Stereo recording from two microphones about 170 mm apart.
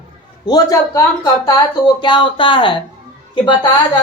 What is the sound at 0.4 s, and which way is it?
Speech, 20° left (ahead or behind).